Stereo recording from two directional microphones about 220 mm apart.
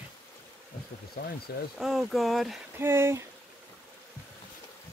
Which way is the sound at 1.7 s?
Centre (ahead or behind).